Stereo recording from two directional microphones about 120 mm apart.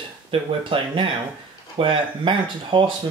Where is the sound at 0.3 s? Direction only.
50° right (ahead or behind).